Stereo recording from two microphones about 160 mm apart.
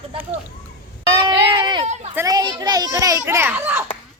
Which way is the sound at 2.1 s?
20° right (ahead or behind).